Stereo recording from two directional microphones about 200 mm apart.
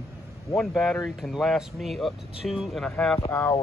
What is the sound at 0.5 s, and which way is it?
Speech, centre (ahead or behind).